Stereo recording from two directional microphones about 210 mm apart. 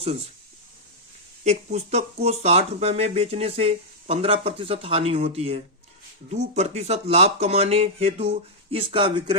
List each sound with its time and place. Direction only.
1.5 s speech: 30° right (ahead or behind)